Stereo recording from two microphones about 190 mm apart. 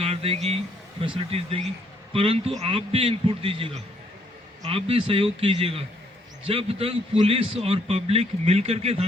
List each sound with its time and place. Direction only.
0.0 s a man's voice: 30° right (ahead or behind)
4.7 s a man's voice: 30° right (ahead or behind)